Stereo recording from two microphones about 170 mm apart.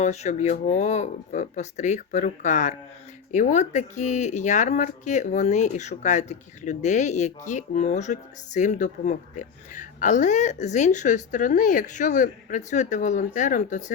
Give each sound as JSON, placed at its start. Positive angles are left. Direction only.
{"t": 0.0, "sound": "speech", "side_deg": 40}